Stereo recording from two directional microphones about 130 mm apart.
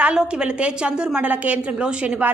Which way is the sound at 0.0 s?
10° right (ahead or behind).